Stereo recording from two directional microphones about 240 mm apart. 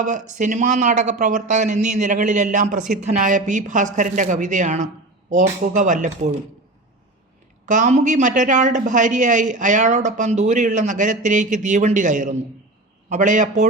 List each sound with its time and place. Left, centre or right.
0.0 s speech: right
7.6 s speech: right